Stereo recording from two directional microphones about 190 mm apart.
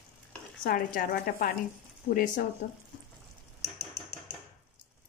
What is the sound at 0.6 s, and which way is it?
Speech, 50° left (ahead or behind).